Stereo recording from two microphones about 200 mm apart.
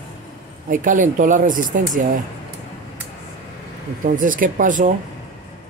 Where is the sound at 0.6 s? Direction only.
40° right (ahead or behind).